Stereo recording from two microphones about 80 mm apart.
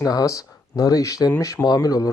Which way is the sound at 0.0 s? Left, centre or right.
Left.